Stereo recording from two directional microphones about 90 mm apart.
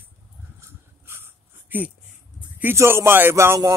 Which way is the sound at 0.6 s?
30° right (ahead or behind).